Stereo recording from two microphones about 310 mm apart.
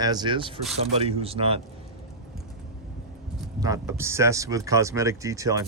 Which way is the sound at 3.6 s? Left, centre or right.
Centre.